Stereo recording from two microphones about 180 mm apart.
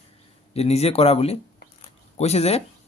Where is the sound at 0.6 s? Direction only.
35° left (ahead or behind).